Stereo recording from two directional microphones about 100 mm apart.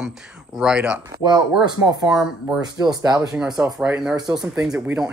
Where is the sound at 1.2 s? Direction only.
45° right (ahead or behind).